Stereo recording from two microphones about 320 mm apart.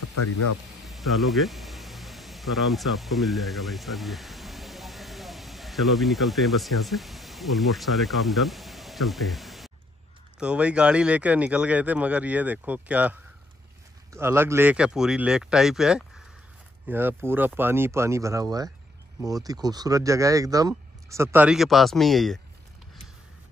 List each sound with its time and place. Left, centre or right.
0.1 s speech: left
0.8 s speech: centre